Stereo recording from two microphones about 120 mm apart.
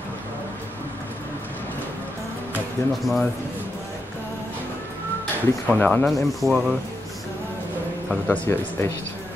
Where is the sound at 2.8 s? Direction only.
25° left (ahead or behind).